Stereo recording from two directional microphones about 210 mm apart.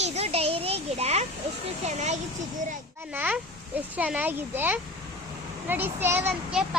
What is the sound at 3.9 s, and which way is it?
A child's voice, 5° right (ahead or behind).